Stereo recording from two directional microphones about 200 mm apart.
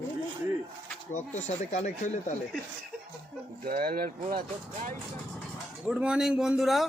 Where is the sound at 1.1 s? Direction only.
35° left (ahead or behind).